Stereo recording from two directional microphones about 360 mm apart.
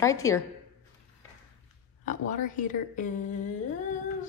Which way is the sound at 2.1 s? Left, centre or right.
Left.